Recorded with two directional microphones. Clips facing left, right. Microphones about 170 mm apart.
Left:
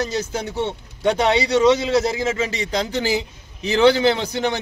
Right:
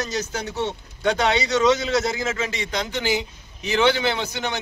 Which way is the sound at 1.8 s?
30° left (ahead or behind).